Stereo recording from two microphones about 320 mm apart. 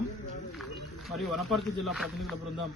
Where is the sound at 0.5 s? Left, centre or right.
Centre.